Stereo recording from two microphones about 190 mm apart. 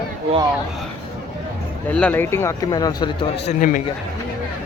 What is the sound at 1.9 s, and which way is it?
Speech, 5° left (ahead or behind).